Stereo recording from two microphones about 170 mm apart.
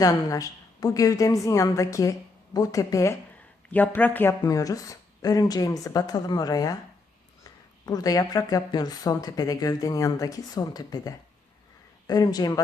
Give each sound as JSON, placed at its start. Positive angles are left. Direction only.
{"t": 0.0, "sound": "speech", "side_deg": 20}
{"t": 7.9, "sound": "speech", "side_deg": 20}